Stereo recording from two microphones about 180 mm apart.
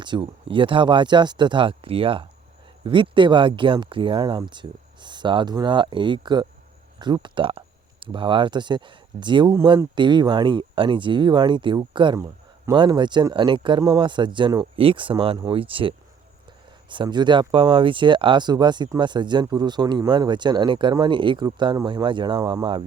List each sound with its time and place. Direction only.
0.0 s speech: 25° right (ahead or behind)